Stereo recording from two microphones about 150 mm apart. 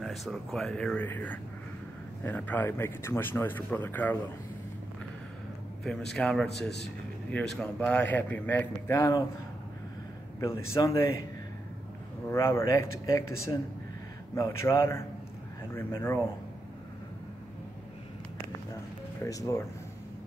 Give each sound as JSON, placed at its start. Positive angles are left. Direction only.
{"t": 0.0, "sound": "speech", "side_deg": 0}
{"t": 6.1, "sound": "speech", "side_deg": 5}
{"t": 10.6, "sound": "speech", "side_deg": 20}
{"t": 12.3, "sound": "speech", "side_deg": 20}
{"t": 19.2, "sound": "speech", "side_deg": 20}